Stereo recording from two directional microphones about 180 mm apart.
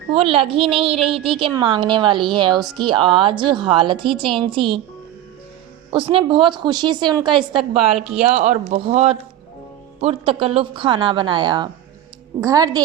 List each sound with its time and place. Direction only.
0.2 s a woman's voice: 30° right (ahead or behind)
5.9 s a woman's voice: 30° right (ahead or behind)